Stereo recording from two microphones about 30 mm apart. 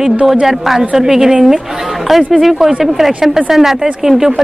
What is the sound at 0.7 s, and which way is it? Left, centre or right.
A woman's voice, centre.